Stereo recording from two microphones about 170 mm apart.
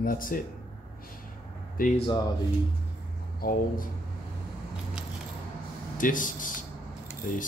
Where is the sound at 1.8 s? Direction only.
55° left (ahead or behind).